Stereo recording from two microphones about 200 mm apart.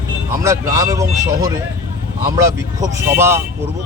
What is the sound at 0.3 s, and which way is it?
Speech, 15° right (ahead or behind).